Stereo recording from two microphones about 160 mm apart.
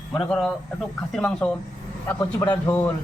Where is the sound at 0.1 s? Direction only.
5° left (ahead or behind).